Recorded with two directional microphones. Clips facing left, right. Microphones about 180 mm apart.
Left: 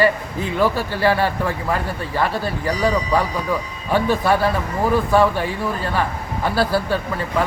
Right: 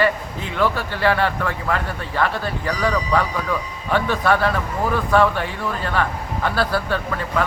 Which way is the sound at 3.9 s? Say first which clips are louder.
Left 2 dB; 10° left (ahead or behind).